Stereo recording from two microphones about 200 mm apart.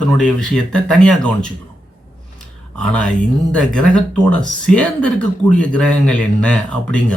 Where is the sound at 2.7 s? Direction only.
5° left (ahead or behind).